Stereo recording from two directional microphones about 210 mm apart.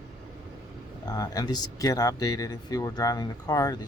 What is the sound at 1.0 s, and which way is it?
Speech, 20° left (ahead or behind).